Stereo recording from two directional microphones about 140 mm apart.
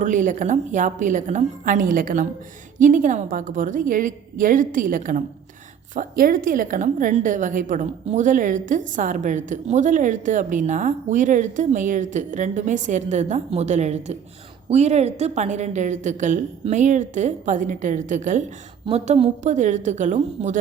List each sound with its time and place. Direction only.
0.0 s a woman's voice: 65° right (ahead or behind)
18.9 s a woman's voice: 50° right (ahead or behind)